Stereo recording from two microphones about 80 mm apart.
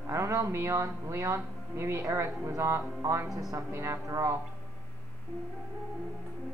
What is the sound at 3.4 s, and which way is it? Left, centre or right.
Speech, right.